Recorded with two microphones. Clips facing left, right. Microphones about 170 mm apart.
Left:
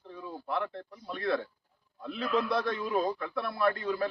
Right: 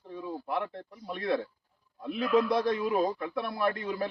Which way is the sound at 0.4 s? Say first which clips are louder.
Left 2 dB; 15° right (ahead or behind).